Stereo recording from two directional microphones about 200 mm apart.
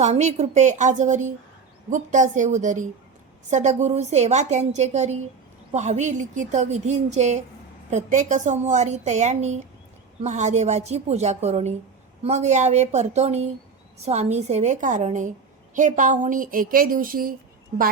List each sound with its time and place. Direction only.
0.0 s a woman's voice: 35° right (ahead or behind)